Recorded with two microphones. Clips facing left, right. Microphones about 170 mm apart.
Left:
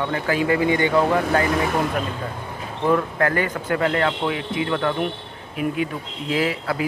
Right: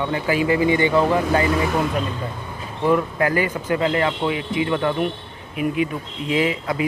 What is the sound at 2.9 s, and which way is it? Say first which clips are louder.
Speech: right 1 dB; 10° right (ahead or behind).